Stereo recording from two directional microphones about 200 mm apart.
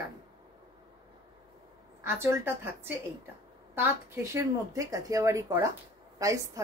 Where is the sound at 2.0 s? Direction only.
10° right (ahead or behind).